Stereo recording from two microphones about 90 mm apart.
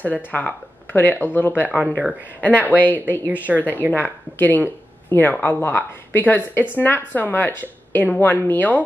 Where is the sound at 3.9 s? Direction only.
20° left (ahead or behind).